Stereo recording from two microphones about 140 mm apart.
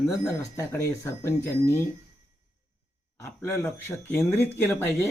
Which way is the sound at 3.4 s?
15° left (ahead or behind).